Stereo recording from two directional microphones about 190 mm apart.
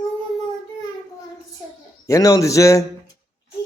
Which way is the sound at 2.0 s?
15° left (ahead or behind).